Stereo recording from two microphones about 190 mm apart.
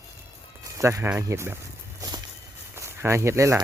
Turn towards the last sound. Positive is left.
turn(degrees=-15)  # may be behind; listen again after turning